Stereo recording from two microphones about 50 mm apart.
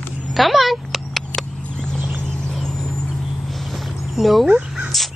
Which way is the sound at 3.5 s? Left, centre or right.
Centre.